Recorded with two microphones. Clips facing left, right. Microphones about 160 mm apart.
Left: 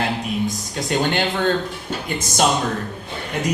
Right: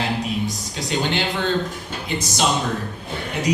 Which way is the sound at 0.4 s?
50° left (ahead or behind).